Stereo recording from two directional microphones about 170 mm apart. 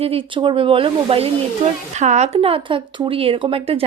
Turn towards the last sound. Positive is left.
turn(degrees=-35)  # may be behind; listen again after turning